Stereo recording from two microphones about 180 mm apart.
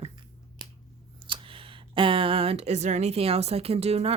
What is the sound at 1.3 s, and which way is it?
Speech, 30° right (ahead or behind).